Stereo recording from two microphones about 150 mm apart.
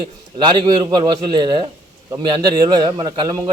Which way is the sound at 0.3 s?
30° right (ahead or behind).